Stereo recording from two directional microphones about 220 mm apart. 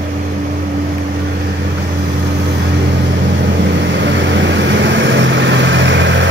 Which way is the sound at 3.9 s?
55° right (ahead or behind).